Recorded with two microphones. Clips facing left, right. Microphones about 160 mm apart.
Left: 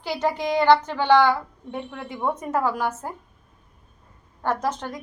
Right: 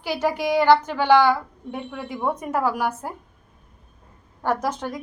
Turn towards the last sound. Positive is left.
turn(degrees=-10)  # may be behind; listen again after turning